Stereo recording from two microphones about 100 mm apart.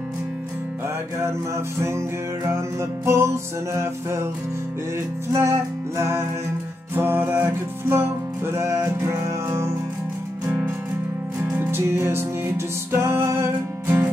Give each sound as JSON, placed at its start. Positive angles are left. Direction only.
{"t": 1.8, "sound": "music", "side_deg": -25}
{"t": 5.3, "sound": "music", "side_deg": -30}
{"t": 10.4, "sound": "music", "side_deg": -20}